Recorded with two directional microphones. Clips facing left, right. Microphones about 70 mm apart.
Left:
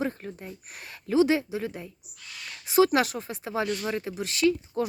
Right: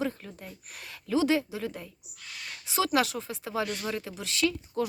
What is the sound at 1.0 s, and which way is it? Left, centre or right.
Speech, left.